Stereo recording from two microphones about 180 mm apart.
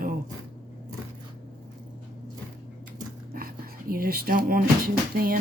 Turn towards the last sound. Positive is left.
turn(degrees=-55)  # may be behind; listen again after turning